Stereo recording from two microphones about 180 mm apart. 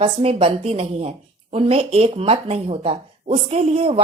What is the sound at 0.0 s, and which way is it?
Speech, 35° right (ahead or behind).